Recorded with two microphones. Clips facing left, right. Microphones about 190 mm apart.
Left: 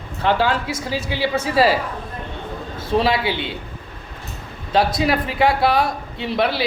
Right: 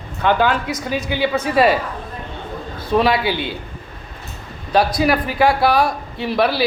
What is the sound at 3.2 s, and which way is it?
Speech, 25° left (ahead or behind).